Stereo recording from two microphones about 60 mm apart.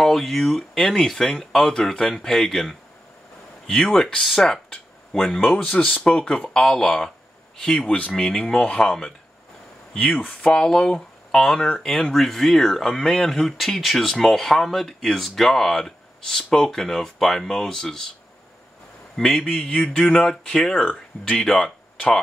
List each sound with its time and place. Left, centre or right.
0.0 s speech: centre
19.1 s speech: centre
19.5 s speech: left
20.1 s speech: centre